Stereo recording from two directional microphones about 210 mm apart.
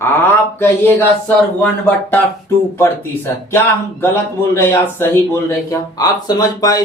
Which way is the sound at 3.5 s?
10° left (ahead or behind).